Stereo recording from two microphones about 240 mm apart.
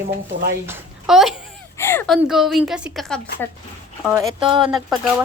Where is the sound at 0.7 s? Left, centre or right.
Centre.